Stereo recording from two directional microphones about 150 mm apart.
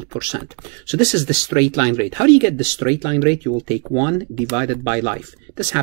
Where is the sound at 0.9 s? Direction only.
25° right (ahead or behind).